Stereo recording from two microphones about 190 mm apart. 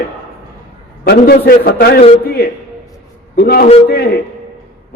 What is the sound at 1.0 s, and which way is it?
A man's voice, 55° left (ahead or behind).